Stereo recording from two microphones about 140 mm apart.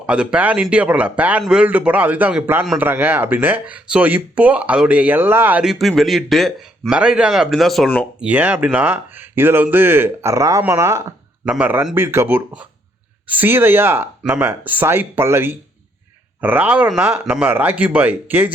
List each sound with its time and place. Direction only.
0.0 s speech: 10° right (ahead or behind)
5.8 s speech: centre (ahead or behind)
8.2 s speech: 10° right (ahead or behind)
11.4 s speech: 10° right (ahead or behind)